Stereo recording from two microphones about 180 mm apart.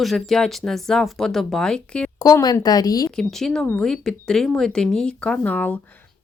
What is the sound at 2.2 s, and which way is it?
Speech, 20° left (ahead or behind).